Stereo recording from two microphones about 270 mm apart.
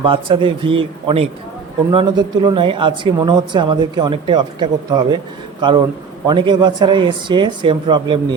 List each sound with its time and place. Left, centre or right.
0.0 s a man's voice: centre